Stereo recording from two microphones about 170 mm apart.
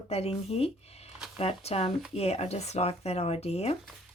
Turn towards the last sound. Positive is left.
turn(degrees=40)  # may be behind; listen again after turning